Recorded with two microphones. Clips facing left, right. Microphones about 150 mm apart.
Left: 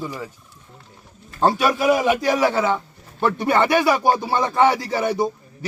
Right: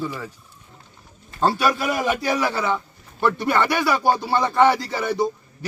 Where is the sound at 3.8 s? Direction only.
20° left (ahead or behind).